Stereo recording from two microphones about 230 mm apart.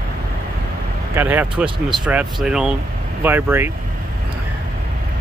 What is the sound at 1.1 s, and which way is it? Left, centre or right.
Speech, centre.